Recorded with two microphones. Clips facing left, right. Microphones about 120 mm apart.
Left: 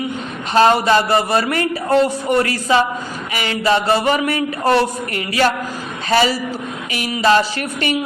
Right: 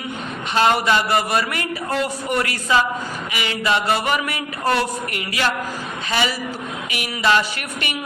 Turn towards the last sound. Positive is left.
turn(degrees=35)  # may be behind; listen again after turning